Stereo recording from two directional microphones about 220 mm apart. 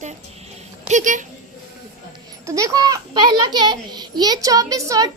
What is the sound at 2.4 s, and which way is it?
A child's voice, 15° right (ahead or behind).